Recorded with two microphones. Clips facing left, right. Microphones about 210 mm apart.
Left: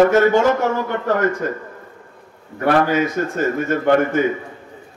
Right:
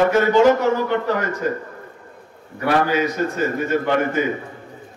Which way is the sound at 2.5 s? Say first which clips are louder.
Left 2 dB; 50° left (ahead or behind).